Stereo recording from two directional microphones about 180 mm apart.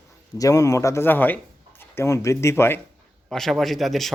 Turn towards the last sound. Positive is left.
turn(degrees=0)  # may be behind; listen again after turning